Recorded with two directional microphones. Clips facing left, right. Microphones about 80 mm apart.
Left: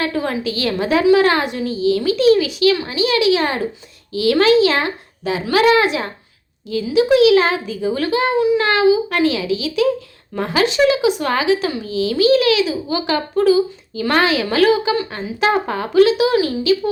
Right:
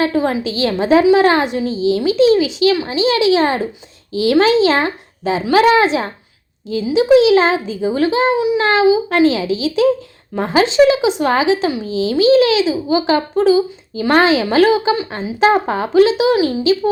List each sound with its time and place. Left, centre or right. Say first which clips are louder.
0.0 s speech: right 4 dB; right